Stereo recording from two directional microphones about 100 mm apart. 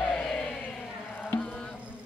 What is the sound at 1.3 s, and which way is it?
Music, 10° left (ahead or behind).